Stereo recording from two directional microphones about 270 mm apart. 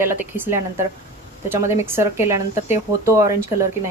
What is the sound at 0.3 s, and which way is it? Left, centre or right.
Speech, centre.